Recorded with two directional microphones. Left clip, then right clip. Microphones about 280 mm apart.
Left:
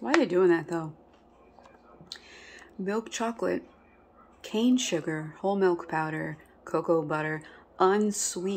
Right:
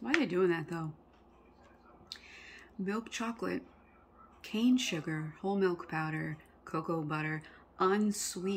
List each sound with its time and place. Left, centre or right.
0.0 s speech: centre
2.8 s speech: centre